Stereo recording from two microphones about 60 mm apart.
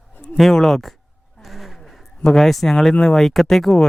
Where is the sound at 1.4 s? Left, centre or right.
Centre.